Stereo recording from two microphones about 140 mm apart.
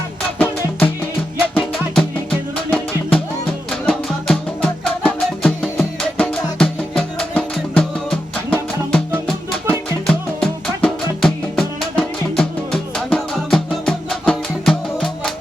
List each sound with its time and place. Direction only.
0.3 s music: 10° left (ahead or behind)
2.6 s music: 5° left (ahead or behind)